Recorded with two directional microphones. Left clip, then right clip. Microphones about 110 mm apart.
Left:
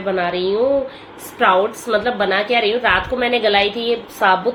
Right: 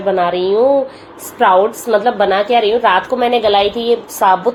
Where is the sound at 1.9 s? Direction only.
35° right (ahead or behind).